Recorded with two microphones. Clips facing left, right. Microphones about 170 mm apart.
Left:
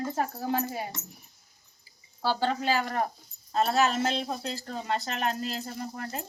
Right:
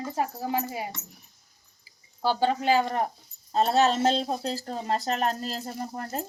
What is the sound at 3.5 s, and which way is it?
Speech, 35° right (ahead or behind).